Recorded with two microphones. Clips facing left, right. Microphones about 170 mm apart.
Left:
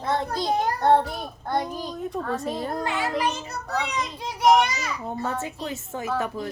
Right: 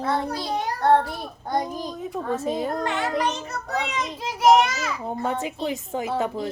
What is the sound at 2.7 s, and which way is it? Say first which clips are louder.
A child's voice: right 1 dB; 5° left (ahead or behind).